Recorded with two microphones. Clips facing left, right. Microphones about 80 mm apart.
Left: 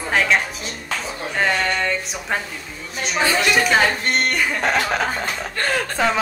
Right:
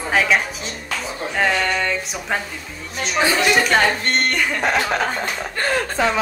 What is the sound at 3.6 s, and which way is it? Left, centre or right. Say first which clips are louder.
Speech: even; centre.